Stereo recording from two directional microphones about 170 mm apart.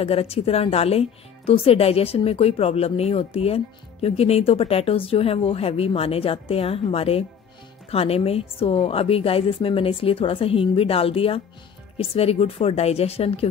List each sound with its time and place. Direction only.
0.0 s speech: 35° left (ahead or behind)